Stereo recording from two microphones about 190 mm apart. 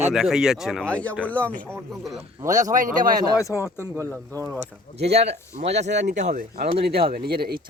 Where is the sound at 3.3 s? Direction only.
15° left (ahead or behind).